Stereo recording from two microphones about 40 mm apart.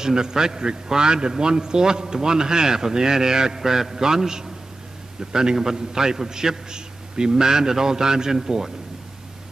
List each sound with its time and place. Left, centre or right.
0.0 s a man's voice: centre